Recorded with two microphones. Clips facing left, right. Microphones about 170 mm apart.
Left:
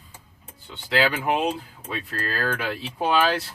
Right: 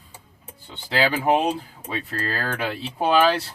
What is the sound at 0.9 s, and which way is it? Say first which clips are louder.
Speech: right 2 dB; 30° right (ahead or behind).